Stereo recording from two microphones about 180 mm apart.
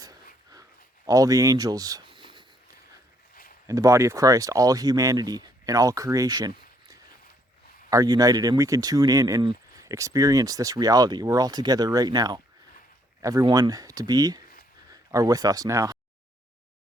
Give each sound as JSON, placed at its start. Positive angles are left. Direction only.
{"t": 1.0, "sound": "speech", "side_deg": -20}
{"t": 3.7, "sound": "speech", "side_deg": -15}